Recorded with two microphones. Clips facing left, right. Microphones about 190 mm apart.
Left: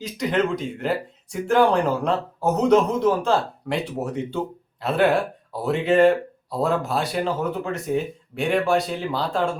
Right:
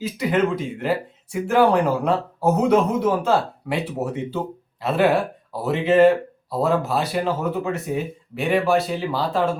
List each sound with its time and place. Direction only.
0.0 s speech: 5° right (ahead or behind)